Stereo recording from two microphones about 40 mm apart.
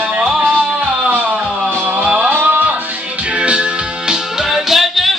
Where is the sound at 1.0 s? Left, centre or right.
Right.